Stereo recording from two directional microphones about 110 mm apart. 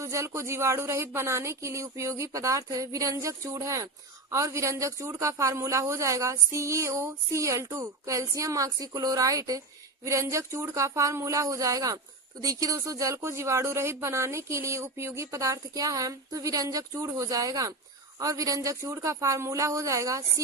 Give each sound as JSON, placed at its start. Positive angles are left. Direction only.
{"t": 0.0, "sound": "speech", "side_deg": -25}